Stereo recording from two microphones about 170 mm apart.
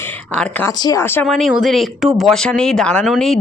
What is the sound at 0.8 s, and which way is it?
Speech, 20° left (ahead or behind).